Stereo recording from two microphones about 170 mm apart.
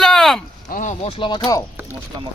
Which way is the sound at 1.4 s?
20° left (ahead or behind).